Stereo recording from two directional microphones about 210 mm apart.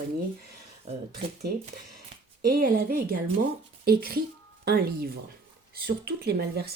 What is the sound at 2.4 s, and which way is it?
Speech, 40° right (ahead or behind).